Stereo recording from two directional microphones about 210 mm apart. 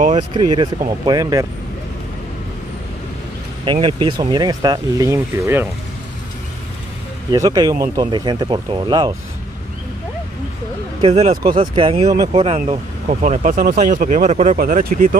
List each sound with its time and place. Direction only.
0.3 s speech: 20° right (ahead or behind)
3.6 s speech: 20° right (ahead or behind)
7.2 s speech: 15° right (ahead or behind)
11.0 s speech: 25° right (ahead or behind)